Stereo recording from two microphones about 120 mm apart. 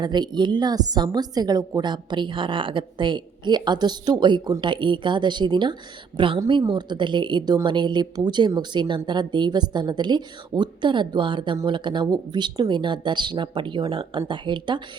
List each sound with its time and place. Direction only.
0.0 s a woman's voice: 35° right (ahead or behind)